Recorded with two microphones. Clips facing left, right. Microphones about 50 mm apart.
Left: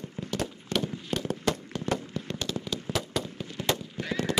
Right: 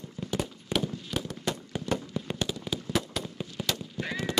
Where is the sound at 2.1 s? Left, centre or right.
Centre.